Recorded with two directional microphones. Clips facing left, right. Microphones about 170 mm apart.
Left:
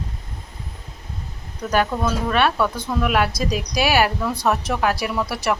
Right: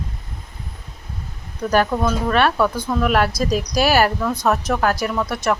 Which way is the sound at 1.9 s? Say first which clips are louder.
Right 2 dB; 5° right (ahead or behind).